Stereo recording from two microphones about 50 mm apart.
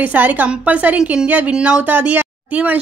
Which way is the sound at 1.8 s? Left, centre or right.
Right.